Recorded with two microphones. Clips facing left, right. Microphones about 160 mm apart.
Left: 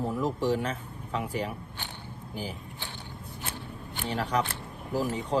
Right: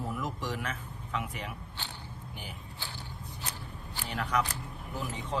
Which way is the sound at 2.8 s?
20° left (ahead or behind).